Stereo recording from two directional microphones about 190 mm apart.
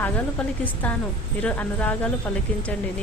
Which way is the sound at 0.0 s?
10° left (ahead or behind).